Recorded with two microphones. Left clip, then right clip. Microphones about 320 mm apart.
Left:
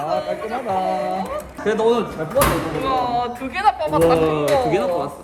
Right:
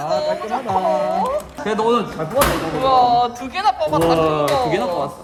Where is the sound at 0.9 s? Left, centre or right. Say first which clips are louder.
Right 4 dB; right.